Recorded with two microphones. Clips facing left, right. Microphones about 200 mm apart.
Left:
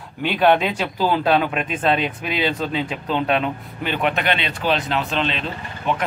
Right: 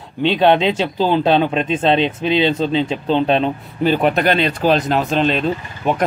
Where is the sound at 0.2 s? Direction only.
25° right (ahead or behind).